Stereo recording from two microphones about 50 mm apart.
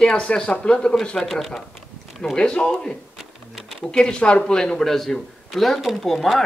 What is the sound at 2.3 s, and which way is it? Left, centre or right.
A man's voice, centre.